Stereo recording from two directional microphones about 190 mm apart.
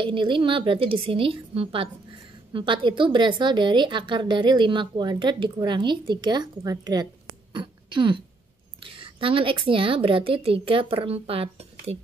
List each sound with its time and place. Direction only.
0.0 s a woman's voice: 25° right (ahead or behind)